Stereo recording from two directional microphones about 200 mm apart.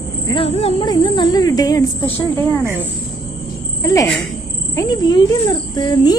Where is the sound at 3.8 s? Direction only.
15° left (ahead or behind).